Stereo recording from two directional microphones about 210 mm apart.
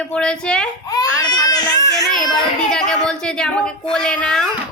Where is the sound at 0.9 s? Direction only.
20° left (ahead or behind).